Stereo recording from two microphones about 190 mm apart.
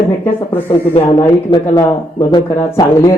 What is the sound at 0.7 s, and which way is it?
Speech, 30° left (ahead or behind).